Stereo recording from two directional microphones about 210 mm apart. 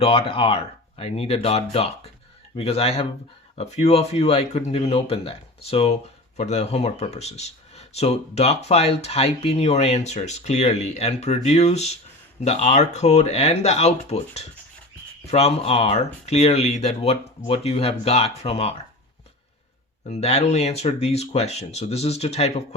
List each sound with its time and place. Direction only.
0.0 s speech: 25° left (ahead or behind)
20.1 s speech: 30° left (ahead or behind)